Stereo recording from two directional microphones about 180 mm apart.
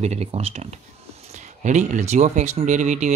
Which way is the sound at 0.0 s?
35° right (ahead or behind).